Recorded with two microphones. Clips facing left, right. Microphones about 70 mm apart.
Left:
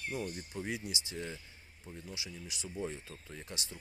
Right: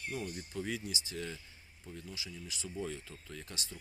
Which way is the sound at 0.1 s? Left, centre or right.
Left.